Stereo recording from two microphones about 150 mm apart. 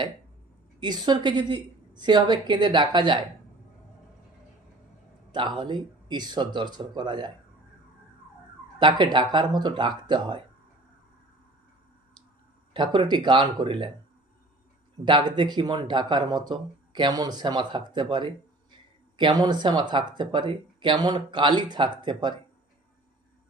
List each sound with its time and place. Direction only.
0.8 s speech: 30° right (ahead or behind)
5.3 s speech: 30° right (ahead or behind)
8.8 s speech: 30° right (ahead or behind)
12.7 s speech: 30° right (ahead or behind)
15.0 s speech: 30° right (ahead or behind)